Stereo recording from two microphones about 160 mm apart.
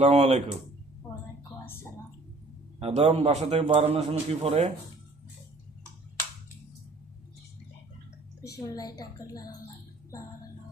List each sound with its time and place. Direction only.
0.0 s speech: 40° right (ahead or behind)
1.6 s a sound: 15° left (ahead or behind)
2.7 s a man's voice: 40° right (ahead or behind)
8.5 s a woman's voice: 25° left (ahead or behind)
10.1 s music: 20° left (ahead or behind)